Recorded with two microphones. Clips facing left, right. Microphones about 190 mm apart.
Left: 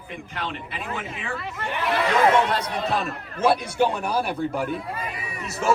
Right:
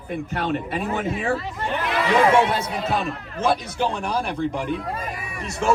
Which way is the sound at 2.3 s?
5° right (ahead or behind).